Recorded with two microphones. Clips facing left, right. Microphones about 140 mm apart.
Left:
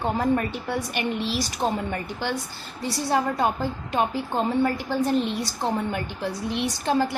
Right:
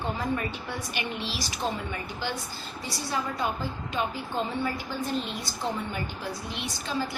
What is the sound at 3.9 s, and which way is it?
A woman's voice, 55° left (ahead or behind).